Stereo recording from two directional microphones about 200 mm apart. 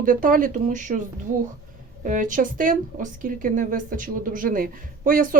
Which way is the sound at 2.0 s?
40° right (ahead or behind).